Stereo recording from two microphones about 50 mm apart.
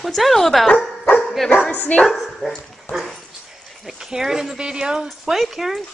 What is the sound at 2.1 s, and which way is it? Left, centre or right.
Dog, centre.